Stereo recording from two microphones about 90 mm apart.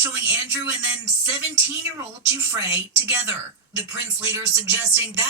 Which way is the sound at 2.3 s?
30° right (ahead or behind).